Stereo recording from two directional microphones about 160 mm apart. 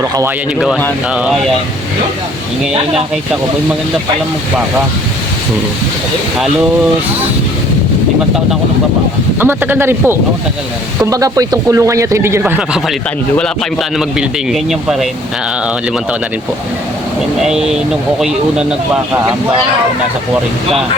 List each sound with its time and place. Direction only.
9.4 s speech: 15° right (ahead or behind)
12.4 s speech: 5° right (ahead or behind)
14.2 s speech: 5° right (ahead or behind)
17.4 s speech: 5° right (ahead or behind)